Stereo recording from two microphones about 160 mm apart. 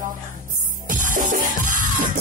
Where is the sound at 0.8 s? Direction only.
55° right (ahead or behind).